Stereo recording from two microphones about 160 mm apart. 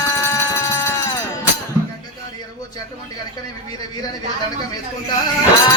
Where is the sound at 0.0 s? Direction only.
15° left (ahead or behind).